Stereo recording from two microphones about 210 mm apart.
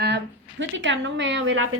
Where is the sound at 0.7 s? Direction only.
60° right (ahead or behind).